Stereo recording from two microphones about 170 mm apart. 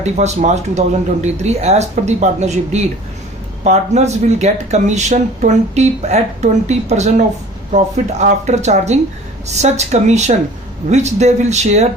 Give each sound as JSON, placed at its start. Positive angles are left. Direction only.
{"t": 0.0, "sound": "speech", "side_deg": -40}
{"t": 8.2, "sound": "speech", "side_deg": -40}